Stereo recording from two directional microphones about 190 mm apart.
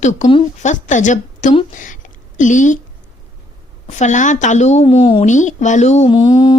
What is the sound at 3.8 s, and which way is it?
Speech, 40° left (ahead or behind).